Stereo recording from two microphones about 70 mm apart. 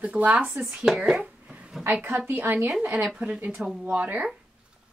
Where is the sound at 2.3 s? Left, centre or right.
Right.